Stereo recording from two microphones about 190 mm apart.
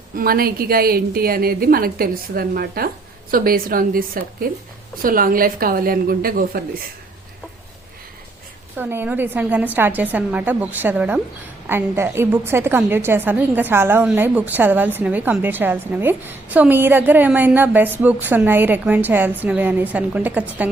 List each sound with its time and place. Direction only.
0.2 s a woman's voice: 50° right (ahead or behind)
8.7 s a woman's voice: 10° right (ahead or behind)